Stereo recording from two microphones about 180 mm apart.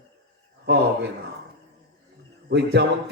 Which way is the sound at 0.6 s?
65° right (ahead or behind).